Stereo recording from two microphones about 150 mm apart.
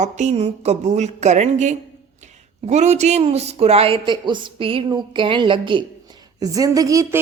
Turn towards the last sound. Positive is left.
turn(degrees=-20)  # may be behind; listen again after turning